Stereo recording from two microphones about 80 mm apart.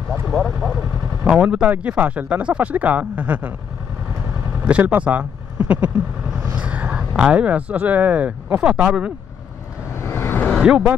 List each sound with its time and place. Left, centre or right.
0.3 s speech: centre
0.7 s speech: centre
4.6 s speech: centre
9.9 s vehicle: left
10.6 s speech: centre